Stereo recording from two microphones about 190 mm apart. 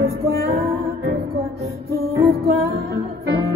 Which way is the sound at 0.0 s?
55° right (ahead or behind).